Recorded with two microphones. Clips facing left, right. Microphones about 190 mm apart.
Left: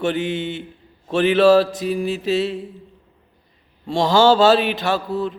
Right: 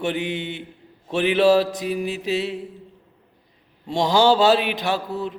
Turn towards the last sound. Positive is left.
turn(degrees=-15)  # may be behind; listen again after turning